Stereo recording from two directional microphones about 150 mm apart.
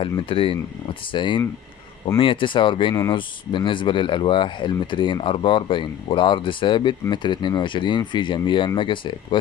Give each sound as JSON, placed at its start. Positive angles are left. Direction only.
{"t": 0.0, "sound": "speech", "side_deg": 35}